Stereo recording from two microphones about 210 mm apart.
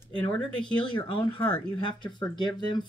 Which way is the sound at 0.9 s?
20° left (ahead or behind).